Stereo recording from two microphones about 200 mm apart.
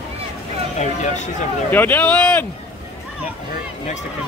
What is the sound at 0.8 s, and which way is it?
Speech, 35° left (ahead or behind).